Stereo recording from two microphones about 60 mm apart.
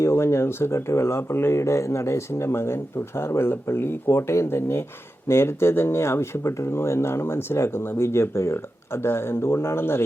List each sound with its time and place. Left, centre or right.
0.0 s speech: left